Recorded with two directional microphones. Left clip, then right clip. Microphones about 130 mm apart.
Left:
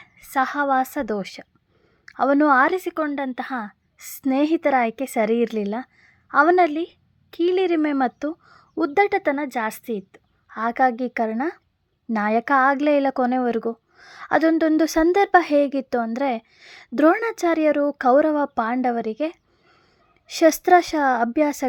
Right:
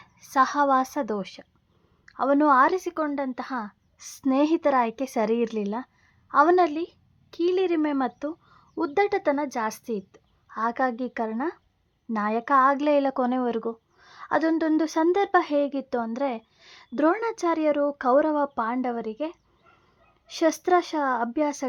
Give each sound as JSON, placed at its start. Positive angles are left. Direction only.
{"t": 0.0, "sound": "a woman's voice", "side_deg": 5}